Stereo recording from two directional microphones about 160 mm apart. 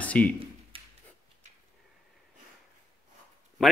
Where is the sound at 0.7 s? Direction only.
35° right (ahead or behind).